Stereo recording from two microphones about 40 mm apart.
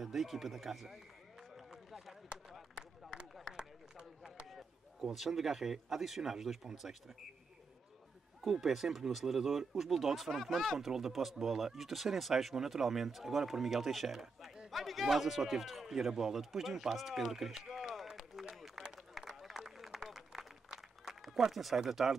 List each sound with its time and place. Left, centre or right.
0.0 s speech: centre
1.7 s a sound: centre
3.5 s run: centre
5.1 s speech: centre
8.4 s speech: centre
18.0 s run: centre
21.4 s speech: centre